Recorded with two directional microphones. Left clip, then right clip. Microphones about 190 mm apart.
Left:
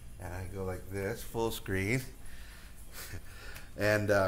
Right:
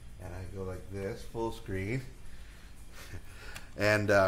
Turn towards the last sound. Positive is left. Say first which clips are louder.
# right 2 dB
turn(degrees=-10)  # may be behind; listen again after turning